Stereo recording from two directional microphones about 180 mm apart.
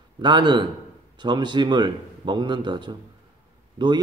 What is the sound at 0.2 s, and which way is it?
A man's voice, 25° right (ahead or behind).